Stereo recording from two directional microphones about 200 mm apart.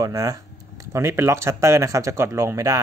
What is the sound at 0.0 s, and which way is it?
Speech, 15° right (ahead or behind).